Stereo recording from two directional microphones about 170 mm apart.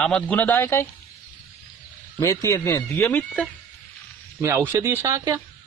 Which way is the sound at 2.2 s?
20° left (ahead or behind).